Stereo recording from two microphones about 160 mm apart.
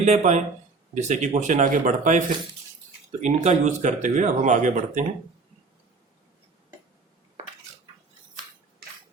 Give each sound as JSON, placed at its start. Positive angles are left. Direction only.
{"t": 0.0, "sound": "speech", "side_deg": -45}